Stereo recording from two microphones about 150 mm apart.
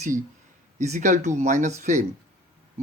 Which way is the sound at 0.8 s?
50° right (ahead or behind).